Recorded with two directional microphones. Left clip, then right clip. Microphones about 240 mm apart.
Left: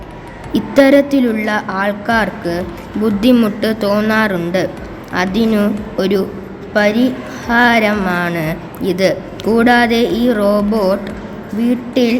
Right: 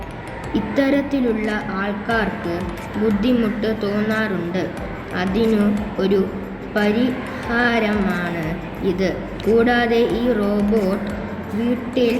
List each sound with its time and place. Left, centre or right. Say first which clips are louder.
0.5 s a woman's voice: left 10 dB; left
12.0 s a woman's voice: left 4 dB; left